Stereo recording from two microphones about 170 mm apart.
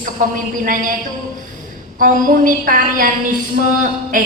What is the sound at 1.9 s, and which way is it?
A woman's voice, 55° right (ahead or behind).